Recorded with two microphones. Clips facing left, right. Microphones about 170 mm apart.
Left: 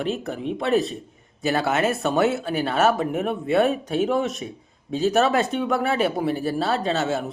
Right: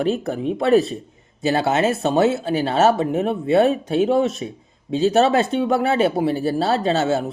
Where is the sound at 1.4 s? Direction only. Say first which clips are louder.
Right 3 dB; 25° right (ahead or behind).